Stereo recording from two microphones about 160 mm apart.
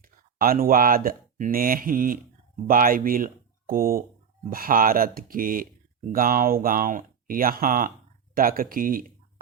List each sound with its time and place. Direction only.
0.0 s speech: 65° right (ahead or behind)